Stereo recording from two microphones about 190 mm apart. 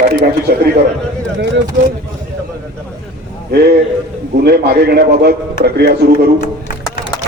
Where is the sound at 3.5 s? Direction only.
55° right (ahead or behind).